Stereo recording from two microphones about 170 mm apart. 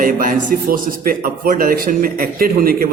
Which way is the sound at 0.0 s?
55° right (ahead or behind).